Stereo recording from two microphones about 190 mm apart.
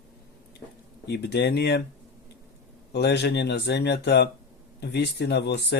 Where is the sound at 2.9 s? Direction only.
60° left (ahead or behind).